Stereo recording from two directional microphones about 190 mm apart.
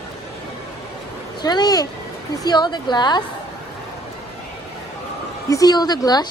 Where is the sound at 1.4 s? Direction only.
20° left (ahead or behind).